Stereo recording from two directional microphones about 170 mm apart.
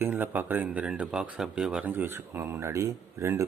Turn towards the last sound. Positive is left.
turn(degrees=-15)  # may be behind; listen again after turning